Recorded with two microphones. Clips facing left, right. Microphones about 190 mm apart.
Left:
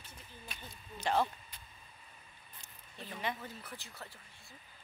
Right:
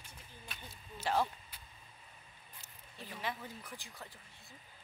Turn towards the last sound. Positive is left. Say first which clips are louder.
# left 1 dB
turn(degrees=-15)  # may be behind; listen again after turning